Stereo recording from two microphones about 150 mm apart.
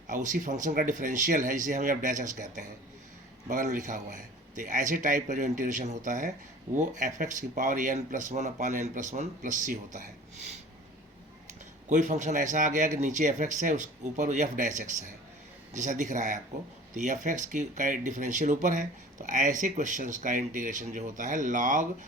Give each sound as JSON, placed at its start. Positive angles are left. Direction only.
{"t": 0.1, "sound": "speech", "side_deg": -60}
{"t": 11.9, "sound": "speech", "side_deg": -55}